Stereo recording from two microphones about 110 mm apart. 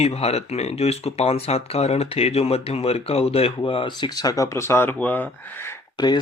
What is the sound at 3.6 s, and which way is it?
Speech, 50° left (ahead or behind).